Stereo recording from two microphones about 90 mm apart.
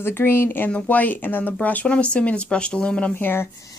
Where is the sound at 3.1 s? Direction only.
25° left (ahead or behind).